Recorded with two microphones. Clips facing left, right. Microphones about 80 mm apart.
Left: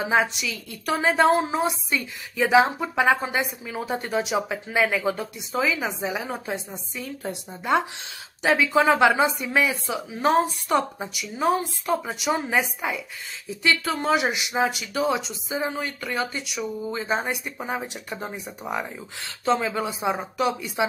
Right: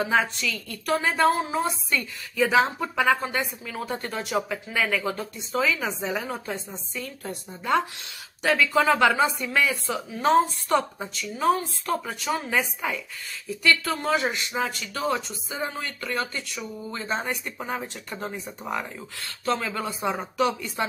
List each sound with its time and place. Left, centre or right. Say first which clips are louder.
0.0 s speech: left 1 dB; centre